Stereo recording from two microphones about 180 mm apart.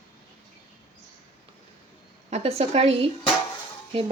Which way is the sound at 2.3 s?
35° right (ahead or behind).